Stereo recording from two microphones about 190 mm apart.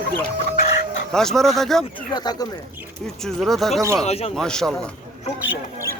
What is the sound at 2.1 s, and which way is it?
Speech, 20° left (ahead or behind).